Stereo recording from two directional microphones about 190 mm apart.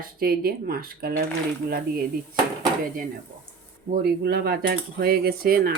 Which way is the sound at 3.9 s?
60° right (ahead or behind).